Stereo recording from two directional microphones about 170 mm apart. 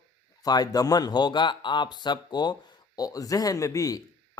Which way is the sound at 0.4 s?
25° left (ahead or behind).